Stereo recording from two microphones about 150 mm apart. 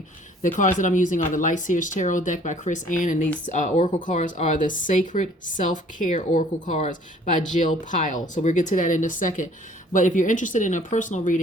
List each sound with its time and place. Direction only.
0.4 s speech: 60° left (ahead or behind)